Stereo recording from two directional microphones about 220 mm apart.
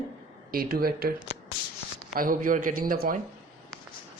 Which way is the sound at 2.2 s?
40° right (ahead or behind).